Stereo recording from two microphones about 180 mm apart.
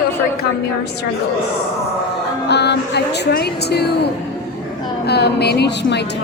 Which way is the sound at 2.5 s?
70° left (ahead or behind).